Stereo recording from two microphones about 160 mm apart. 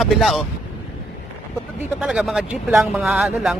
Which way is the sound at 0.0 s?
Centre (ahead or behind).